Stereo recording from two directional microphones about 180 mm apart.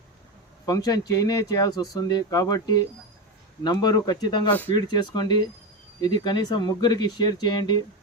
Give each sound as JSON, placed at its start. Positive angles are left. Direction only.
{"t": 0.6, "sound": "speech", "side_deg": 20}